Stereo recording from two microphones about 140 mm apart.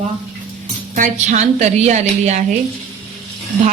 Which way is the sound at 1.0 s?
55° right (ahead or behind).